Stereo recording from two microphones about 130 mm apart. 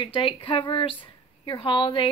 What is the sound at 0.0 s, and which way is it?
A woman's voice, 40° left (ahead or behind).